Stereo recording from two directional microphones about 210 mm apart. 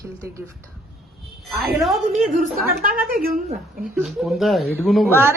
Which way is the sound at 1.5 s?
Centre (ahead or behind).